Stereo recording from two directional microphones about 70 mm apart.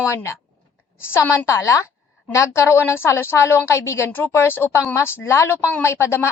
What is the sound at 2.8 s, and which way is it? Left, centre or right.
A woman's voice, left.